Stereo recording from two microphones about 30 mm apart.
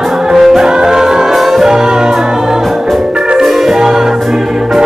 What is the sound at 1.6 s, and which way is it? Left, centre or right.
Music, right.